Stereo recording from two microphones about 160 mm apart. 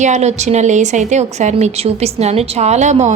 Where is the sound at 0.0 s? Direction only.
45° right (ahead or behind).